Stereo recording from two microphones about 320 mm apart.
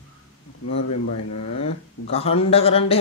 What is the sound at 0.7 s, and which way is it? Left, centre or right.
Speech, left.